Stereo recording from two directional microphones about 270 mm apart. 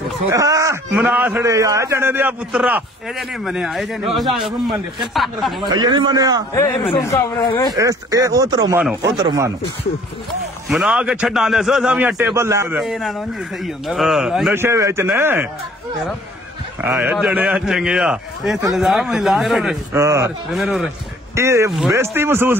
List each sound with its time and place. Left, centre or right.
0.3 s a man's voice: centre
5.7 s a man's voice: centre
6.5 s speech: centre
7.7 s a man's voice: centre
10.7 s a man's voice: centre
16.8 s a man's voice: centre